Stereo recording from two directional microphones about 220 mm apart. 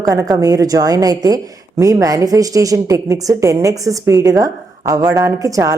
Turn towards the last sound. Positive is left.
turn(degrees=-15)  # may be behind; listen again after turning